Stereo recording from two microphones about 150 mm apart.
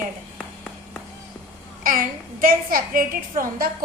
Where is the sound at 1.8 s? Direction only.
70° right (ahead or behind).